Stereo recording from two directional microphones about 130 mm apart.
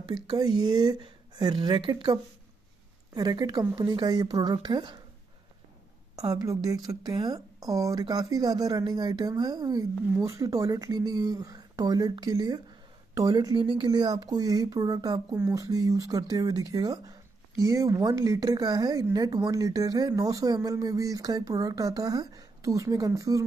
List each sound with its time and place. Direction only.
0.1 s speech: 30° right (ahead or behind)
3.2 s speech: 30° right (ahead or behind)
6.1 s speech: 30° right (ahead or behind)